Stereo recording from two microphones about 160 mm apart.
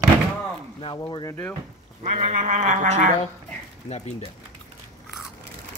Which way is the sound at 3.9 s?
40° left (ahead or behind).